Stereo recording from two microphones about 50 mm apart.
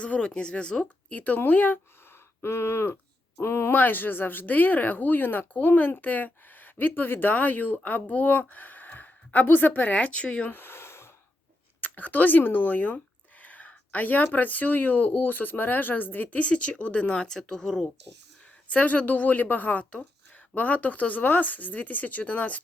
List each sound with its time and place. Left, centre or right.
0.0 s speech: left
1.1 s speech: left
2.4 s a sound: left
3.8 s a woman's voice: left
10.5 s a sound: left
11.8 s speech: left; by 17.9 s centre
18.7 s speech: left